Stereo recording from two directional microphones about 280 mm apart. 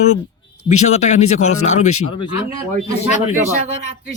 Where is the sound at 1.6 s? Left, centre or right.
Left.